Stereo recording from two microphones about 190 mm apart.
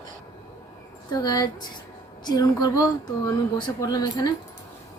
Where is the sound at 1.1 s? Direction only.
20° left (ahead or behind).